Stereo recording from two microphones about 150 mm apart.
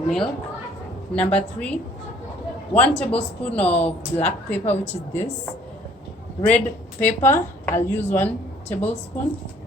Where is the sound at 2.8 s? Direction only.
10° left (ahead or behind).